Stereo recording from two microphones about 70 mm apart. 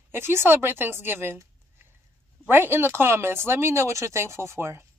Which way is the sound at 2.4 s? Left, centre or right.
Right.